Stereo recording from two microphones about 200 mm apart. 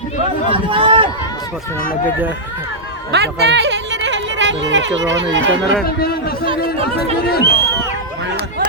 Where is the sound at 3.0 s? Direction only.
55° right (ahead or behind).